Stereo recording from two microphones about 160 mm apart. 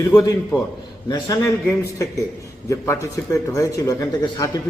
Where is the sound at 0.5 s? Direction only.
25° left (ahead or behind).